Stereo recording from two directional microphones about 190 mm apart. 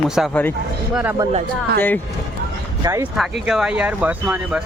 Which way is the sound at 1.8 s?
10° left (ahead or behind).